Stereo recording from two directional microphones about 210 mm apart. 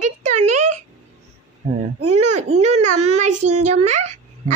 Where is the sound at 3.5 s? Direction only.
90° right.